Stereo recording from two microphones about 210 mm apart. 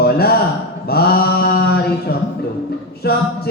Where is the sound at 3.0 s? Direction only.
50° left (ahead or behind).